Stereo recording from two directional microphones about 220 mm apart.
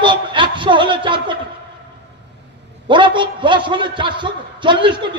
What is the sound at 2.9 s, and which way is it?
A man's voice, 20° right (ahead or behind).